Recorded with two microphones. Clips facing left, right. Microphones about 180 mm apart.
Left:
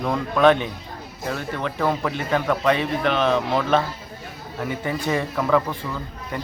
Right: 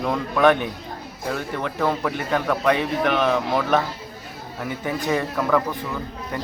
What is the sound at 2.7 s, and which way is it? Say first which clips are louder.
Speech: right 1 dB; 15° right (ahead or behind).